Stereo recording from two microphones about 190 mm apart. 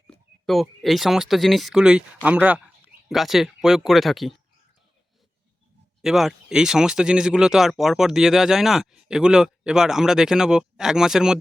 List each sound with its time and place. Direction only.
0.1 s speech: centre (ahead or behind)
6.0 s speech: centre (ahead or behind)